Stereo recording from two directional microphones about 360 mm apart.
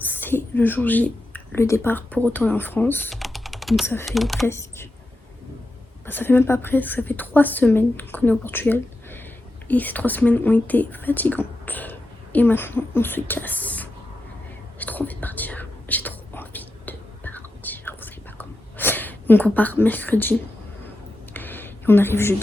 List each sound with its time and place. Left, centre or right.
0.0 s speech: centre
6.1 s a woman's voice: centre
14.8 s whispering: centre
21.3 s a sound: centre